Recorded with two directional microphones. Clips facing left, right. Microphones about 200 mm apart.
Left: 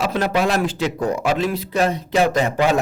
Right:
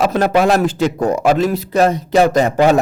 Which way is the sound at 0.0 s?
50° right (ahead or behind).